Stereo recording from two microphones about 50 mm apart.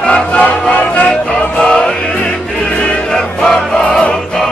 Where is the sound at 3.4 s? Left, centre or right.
Centre.